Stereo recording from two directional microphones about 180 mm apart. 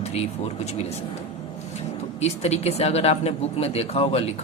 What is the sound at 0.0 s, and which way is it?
A man's voice, 35° left (ahead or behind).